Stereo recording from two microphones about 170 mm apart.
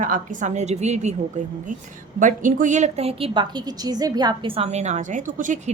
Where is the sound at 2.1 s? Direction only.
50° right (ahead or behind).